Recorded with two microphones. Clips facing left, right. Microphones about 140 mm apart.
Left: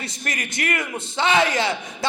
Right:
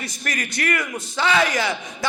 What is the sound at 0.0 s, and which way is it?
A man's voice, 25° left (ahead or behind).